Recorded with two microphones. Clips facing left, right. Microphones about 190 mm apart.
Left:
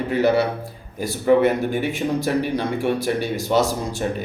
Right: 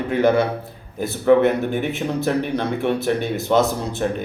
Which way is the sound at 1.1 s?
10° left (ahead or behind).